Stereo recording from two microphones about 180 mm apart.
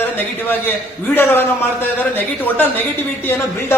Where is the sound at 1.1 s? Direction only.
10° left (ahead or behind).